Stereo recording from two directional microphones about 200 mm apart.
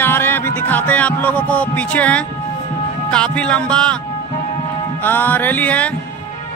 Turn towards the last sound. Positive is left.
turn(degrees=5)  # may be behind; listen again after turning